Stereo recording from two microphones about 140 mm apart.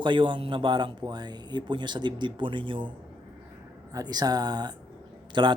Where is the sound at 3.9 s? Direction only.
30° right (ahead or behind).